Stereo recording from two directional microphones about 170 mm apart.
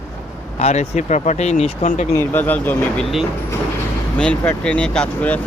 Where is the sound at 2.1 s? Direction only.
10° left (ahead or behind).